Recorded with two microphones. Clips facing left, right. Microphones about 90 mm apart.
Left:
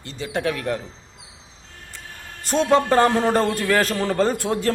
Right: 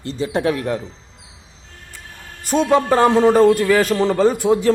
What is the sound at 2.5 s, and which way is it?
A man's voice, 10° right (ahead or behind).